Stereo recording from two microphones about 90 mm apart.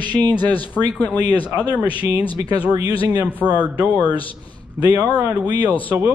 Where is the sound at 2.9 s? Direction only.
75° left (ahead or behind).